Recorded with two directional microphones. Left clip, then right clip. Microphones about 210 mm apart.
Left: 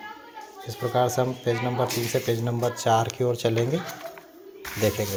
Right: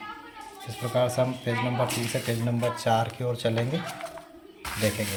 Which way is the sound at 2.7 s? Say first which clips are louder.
Left 5 dB; 25° left (ahead or behind).